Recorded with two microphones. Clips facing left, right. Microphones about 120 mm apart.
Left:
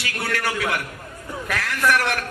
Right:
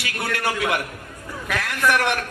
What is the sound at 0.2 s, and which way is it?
Speech, 20° right (ahead or behind).